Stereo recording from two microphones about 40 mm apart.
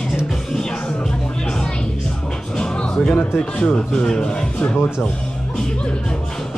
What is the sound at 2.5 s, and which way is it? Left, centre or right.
Music, centre.